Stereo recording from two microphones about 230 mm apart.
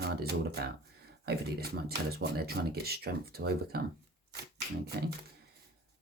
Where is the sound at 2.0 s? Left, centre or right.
Right.